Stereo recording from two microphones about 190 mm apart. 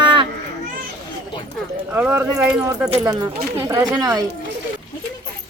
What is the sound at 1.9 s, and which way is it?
Speech, 10° right (ahead or behind).